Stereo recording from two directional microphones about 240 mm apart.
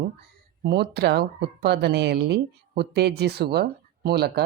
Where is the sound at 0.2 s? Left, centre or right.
Right.